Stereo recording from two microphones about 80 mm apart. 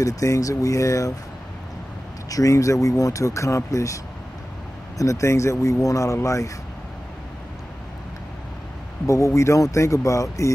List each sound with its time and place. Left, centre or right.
0.0 s speech: left
2.2 s speech: left
9.0 s speech: left